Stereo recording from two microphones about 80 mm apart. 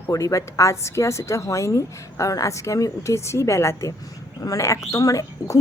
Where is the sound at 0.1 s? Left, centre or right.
Left.